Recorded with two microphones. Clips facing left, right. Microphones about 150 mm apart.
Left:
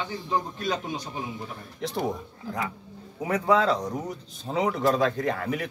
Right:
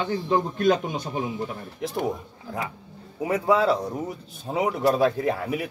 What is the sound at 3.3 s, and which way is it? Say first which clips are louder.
A man's voice: right 1 dB; 10° right (ahead or behind).